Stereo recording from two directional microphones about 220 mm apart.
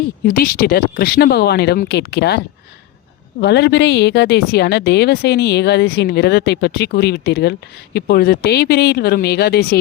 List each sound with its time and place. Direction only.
0.3 s a woman's voice: 40° left (ahead or behind)
3.4 s a woman's voice: 50° left (ahead or behind)